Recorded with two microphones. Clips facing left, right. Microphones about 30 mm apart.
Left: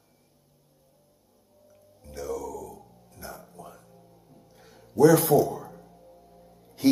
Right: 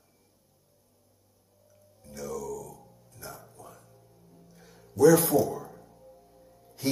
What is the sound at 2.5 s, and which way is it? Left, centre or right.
Music, centre.